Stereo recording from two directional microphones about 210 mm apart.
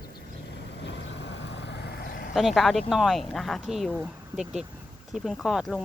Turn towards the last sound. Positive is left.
turn(degrees=0)  # may be behind; listen again after turning